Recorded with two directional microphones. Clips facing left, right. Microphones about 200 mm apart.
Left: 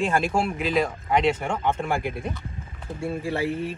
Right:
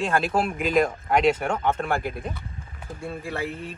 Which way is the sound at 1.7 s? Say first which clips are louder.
Even; 10° left (ahead or behind).